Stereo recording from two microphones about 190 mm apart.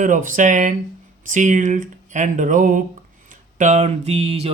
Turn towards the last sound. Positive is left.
turn(degrees=-35)  # may be behind; listen again after turning